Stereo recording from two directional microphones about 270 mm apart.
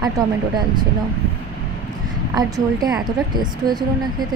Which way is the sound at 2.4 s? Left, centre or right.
Centre.